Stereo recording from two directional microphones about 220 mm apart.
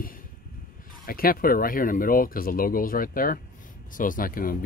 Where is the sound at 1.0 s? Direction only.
40° left (ahead or behind).